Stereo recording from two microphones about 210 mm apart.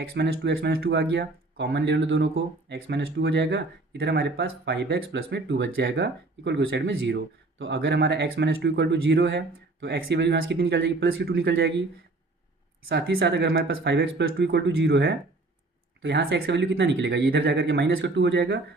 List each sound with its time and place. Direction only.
0.1 s speech: 50° right (ahead or behind)
12.9 s speech: 50° right (ahead or behind)